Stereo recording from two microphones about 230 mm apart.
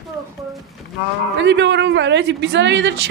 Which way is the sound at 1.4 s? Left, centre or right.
Right.